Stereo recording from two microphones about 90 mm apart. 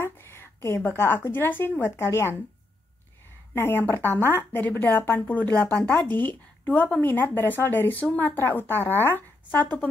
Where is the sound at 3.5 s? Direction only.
25° left (ahead or behind).